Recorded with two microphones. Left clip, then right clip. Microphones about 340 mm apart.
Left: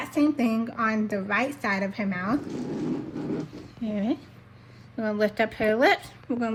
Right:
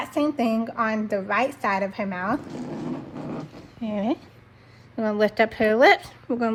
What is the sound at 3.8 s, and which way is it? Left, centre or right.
A woman's voice, right.